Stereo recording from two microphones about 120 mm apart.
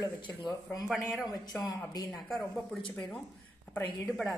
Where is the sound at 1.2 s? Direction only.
30° left (ahead or behind).